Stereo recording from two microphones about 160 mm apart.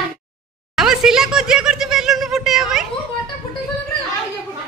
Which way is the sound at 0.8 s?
5° right (ahead or behind).